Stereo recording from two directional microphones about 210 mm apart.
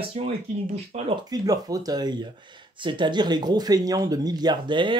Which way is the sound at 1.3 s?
15° right (ahead or behind).